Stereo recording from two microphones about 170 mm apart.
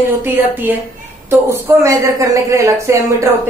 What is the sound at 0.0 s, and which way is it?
A woman's voice, 10° right (ahead or behind).